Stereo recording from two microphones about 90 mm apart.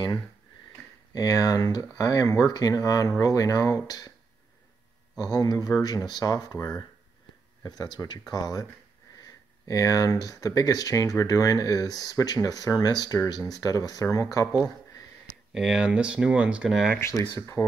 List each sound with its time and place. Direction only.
1.1 s speech: 40° left (ahead or behind)
5.2 s speech: 45° left (ahead or behind)
15.5 s speech: 5° right (ahead or behind)
17.0 s speech: 40° left (ahead or behind)